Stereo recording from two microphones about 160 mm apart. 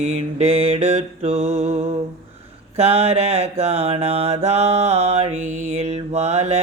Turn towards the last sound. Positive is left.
turn(degrees=-40)  # may be behind; listen again after turning